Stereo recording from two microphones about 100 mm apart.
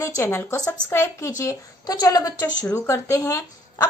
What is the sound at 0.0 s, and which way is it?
A woman's voice, 25° left (ahead or behind).